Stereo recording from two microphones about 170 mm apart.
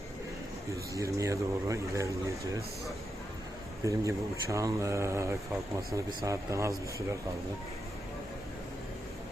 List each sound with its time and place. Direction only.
0.9 s speech: 20° right (ahead or behind)
3.8 s speech: 20° right (ahead or behind)